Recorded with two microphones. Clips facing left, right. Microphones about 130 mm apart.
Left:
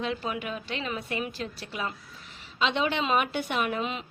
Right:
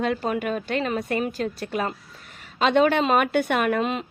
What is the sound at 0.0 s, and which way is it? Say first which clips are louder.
A woman's voice: right 7 dB; 50° right (ahead or behind).